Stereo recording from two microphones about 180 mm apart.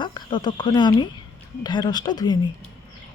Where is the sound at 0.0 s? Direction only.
25° left (ahead or behind).